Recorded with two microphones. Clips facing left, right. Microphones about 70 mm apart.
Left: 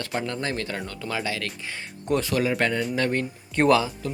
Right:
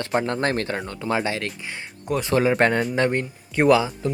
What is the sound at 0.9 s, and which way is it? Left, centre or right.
Speech, right.